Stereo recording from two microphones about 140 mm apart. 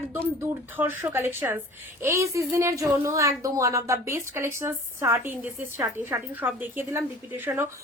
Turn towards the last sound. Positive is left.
turn(degrees=-15)  # may be behind; listen again after turning